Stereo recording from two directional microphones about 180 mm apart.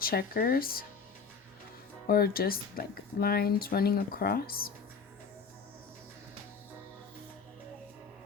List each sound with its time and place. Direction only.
0.0 s speech: 55° left (ahead or behind)
2.0 s speech: 55° left (ahead or behind)